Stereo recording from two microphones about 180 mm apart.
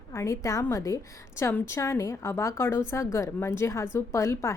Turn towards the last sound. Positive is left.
turn(degrees=15)  # may be behind; listen again after turning